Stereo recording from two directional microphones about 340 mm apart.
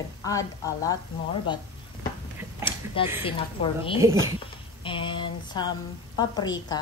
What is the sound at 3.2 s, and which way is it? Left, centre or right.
Speech, centre.